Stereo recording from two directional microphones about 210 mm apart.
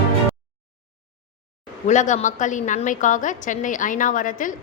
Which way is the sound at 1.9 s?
35° left (ahead or behind).